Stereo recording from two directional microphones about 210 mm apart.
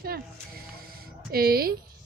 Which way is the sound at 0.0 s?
45° right (ahead or behind).